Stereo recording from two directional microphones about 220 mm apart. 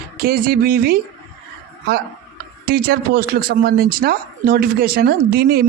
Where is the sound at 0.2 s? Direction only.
45° right (ahead or behind).